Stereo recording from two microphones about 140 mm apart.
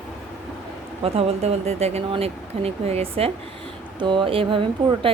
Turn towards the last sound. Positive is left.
turn(degrees=-40)  # may be behind; listen again after turning